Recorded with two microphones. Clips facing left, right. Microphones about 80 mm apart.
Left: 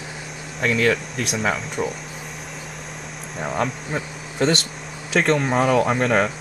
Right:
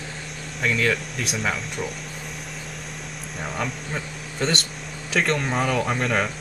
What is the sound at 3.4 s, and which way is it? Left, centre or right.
Speech, centre.